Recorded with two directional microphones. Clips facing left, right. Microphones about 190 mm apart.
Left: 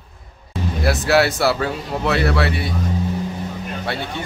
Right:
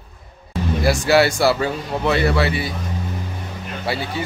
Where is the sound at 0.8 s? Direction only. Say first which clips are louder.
Right 1 dB; centre (ahead or behind).